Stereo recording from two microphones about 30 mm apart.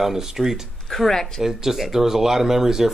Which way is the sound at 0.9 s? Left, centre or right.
Centre.